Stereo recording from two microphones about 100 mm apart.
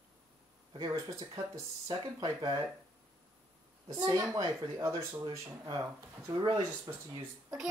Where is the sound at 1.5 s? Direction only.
45° right (ahead or behind).